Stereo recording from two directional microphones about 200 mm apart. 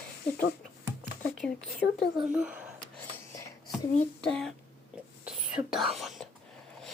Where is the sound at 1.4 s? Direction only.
60° left (ahead or behind).